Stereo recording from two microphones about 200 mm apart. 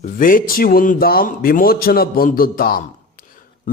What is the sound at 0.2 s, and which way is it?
A man's voice, 45° left (ahead or behind).